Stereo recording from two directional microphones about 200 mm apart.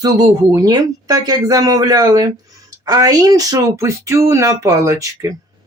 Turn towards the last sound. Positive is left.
turn(degrees=-15)  # may be behind; listen again after turning